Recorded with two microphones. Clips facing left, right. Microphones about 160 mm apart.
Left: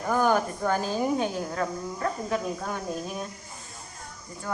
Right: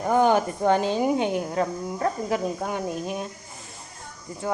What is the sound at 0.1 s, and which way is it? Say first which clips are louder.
A woman's voice: right 4 dB; 25° right (ahead or behind).